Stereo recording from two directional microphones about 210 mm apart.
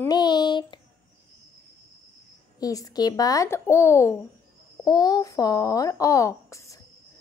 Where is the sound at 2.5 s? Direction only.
15° left (ahead or behind).